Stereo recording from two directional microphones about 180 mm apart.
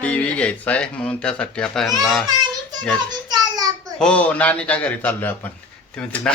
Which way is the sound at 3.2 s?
20° right (ahead or behind).